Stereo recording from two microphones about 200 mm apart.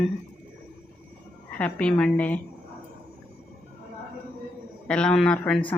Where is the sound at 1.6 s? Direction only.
5° left (ahead or behind).